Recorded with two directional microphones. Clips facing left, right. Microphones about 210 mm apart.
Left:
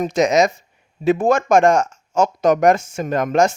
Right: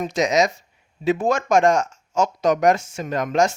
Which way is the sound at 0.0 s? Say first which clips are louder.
Left 4 dB; 50° left (ahead or behind).